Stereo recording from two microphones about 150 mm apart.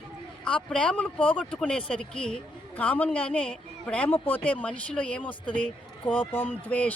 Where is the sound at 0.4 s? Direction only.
5° left (ahead or behind).